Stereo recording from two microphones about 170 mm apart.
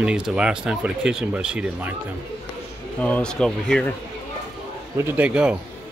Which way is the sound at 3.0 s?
5° left (ahead or behind).